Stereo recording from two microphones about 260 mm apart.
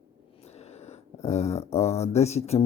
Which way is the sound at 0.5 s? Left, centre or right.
Left.